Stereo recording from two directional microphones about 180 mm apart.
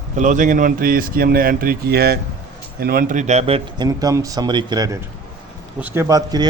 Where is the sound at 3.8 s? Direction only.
20° right (ahead or behind).